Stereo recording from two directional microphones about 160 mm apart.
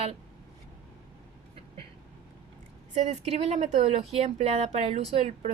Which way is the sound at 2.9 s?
45° right (ahead or behind).